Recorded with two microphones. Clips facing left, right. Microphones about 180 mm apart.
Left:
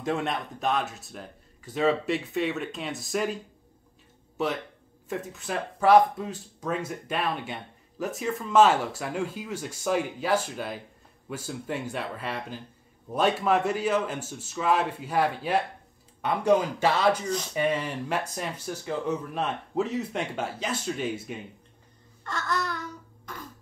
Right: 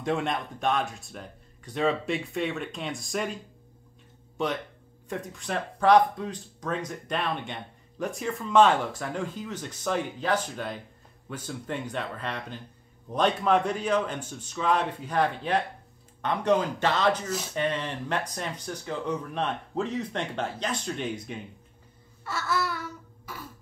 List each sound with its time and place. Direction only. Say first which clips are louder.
0.0 s speech: even; centre (ahead or behind)
4.4 s speech: left 1 dB; 5° left (ahead or behind)
22.2 s a sound: right 1 dB; 5° right (ahead or behind)